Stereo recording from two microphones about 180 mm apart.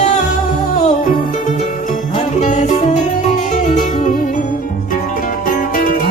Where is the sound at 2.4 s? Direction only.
45° left (ahead or behind).